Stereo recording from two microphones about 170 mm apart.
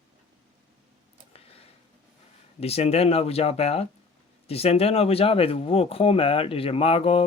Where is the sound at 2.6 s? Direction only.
35° left (ahead or behind).